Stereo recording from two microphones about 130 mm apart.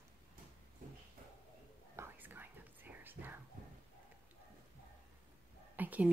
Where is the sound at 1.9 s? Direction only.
15° right (ahead or behind).